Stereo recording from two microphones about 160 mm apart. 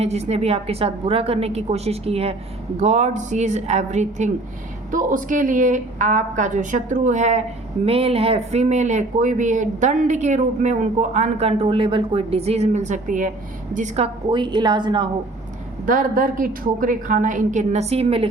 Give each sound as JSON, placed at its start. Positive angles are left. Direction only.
{"t": 0.0, "sound": "a woman's voice", "side_deg": -40}
{"t": 15.9, "sound": "a woman's voice", "side_deg": -55}